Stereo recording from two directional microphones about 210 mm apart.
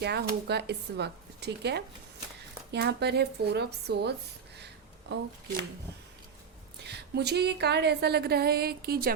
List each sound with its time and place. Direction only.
0.0 s a woman's voice: 50° right (ahead or behind)
4.5 s a sound: 50° right (ahead or behind)
6.8 s a woman's voice: 50° right (ahead or behind)